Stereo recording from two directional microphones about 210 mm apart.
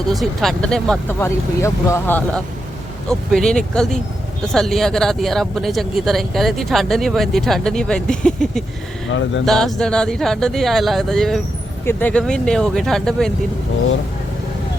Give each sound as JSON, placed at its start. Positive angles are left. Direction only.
{"t": 0.1, "sound": "speech", "side_deg": 0}
{"t": 9.0, "sound": "speech", "side_deg": 60}
{"t": 9.5, "sound": "speech", "side_deg": 0}